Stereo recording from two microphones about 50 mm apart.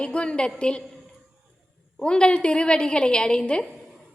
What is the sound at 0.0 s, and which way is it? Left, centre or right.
Speech, centre.